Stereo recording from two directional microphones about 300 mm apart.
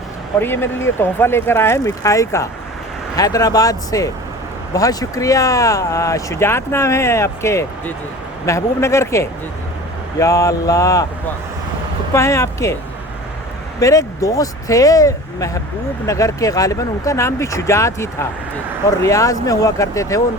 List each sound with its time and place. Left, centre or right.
0.3 s speech: centre
12.1 s speech: centre
13.7 s speech: centre